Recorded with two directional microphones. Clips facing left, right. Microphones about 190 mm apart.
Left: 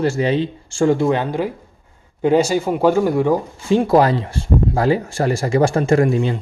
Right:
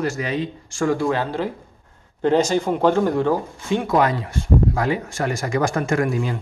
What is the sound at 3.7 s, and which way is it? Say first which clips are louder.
A man's voice: left 5 dB; 35° left (ahead or behind).